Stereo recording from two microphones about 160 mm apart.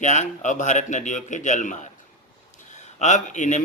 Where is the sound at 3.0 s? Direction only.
50° left (ahead or behind).